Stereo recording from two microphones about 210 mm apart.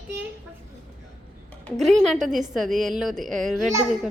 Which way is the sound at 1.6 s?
Centre (ahead or behind).